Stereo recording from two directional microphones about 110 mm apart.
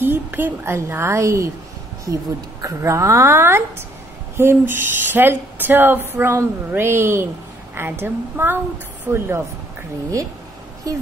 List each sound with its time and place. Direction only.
0.0 s speech: 20° right (ahead or behind)
2.6 s speech: 30° right (ahead or behind)